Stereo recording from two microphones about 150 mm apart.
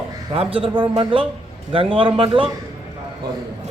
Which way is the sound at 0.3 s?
35° right (ahead or behind).